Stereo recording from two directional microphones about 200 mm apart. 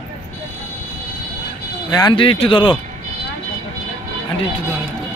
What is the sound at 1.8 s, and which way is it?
Speech, 20° left (ahead or behind).